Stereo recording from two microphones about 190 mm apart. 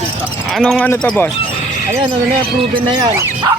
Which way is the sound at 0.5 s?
5° left (ahead or behind).